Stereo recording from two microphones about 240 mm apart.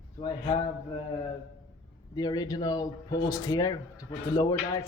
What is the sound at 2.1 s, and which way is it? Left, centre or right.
Speech, centre.